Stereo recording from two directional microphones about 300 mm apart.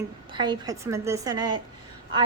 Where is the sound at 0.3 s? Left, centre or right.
Centre.